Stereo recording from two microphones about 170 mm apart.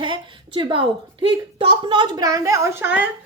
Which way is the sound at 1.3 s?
30° right (ahead or behind).